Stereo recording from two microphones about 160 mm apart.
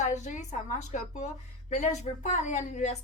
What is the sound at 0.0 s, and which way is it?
A woman's voice, 50° left (ahead or behind).